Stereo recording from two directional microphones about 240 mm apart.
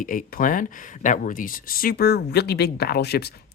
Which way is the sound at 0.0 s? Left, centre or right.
Left.